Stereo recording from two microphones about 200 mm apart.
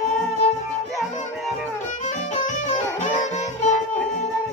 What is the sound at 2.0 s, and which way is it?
Music, 35° left (ahead or behind).